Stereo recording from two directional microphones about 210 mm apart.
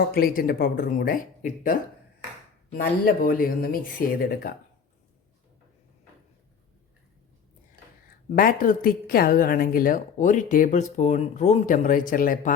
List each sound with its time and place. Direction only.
0.0 s speech: 45° left (ahead or behind)
3.1 s speech: 40° left (ahead or behind)
8.4 s a woman's voice: 40° left (ahead or behind)